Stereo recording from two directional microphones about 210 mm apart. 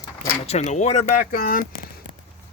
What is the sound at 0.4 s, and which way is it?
Speech, 35° left (ahead or behind).